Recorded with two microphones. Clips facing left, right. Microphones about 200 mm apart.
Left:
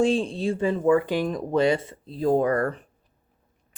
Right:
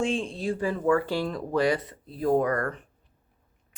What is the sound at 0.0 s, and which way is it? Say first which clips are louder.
Speech: left 5 dB; 35° left (ahead or behind).